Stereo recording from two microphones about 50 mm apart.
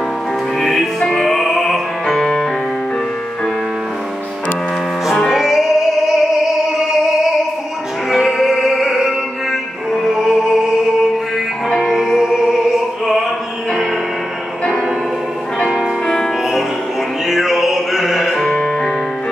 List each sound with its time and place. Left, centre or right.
0.6 s music: centre
5.3 s music: centre
8.1 s music: centre
11.7 s music: centre
17.3 s music: centre
18.4 s music: centre